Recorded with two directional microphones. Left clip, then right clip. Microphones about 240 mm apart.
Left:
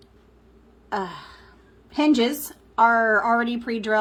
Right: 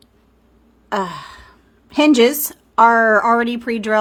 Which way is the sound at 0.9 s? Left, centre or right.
Right.